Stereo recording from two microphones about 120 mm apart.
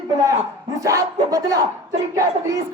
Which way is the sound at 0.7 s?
25° right (ahead or behind).